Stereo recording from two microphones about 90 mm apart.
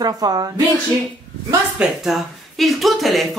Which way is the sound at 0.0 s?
45° right (ahead or behind).